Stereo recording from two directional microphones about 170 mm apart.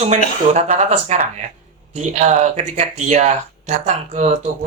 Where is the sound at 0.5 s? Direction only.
40° right (ahead or behind).